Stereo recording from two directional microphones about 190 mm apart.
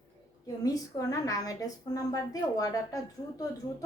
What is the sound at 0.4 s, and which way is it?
A woman's voice, 20° left (ahead or behind).